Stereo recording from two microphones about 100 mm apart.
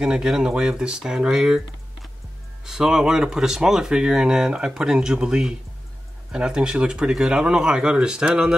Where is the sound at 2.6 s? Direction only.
5° right (ahead or behind).